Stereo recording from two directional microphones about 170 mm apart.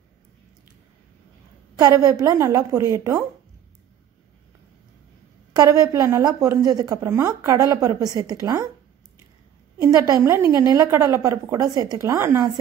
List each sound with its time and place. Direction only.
1.8 s a woman's voice: 20° right (ahead or behind)
5.6 s a woman's voice: 20° right (ahead or behind)
9.8 s a woman's voice: 20° right (ahead or behind)